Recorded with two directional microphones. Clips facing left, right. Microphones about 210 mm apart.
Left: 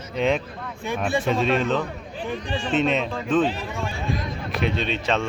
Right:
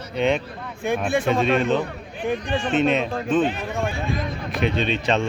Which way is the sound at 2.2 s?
55° right (ahead or behind).